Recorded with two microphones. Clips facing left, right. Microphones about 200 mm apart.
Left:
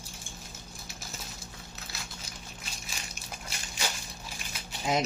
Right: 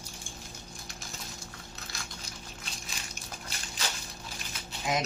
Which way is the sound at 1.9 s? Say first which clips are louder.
Even; 5° left (ahead or behind).